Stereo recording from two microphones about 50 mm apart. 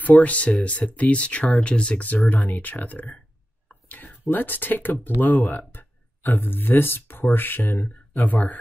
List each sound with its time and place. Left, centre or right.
0.0 s speech: left
8.3 s speech: left